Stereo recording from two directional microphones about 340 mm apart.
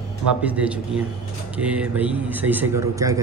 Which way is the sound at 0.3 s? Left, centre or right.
Centre.